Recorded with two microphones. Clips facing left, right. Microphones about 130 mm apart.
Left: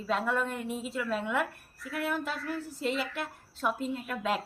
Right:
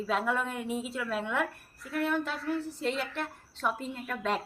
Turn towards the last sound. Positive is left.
turn(degrees=5)  # may be behind; listen again after turning